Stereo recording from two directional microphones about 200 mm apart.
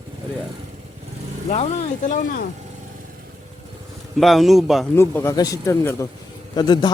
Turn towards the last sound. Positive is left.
turn(degrees=20)  # may be behind; listen again after turning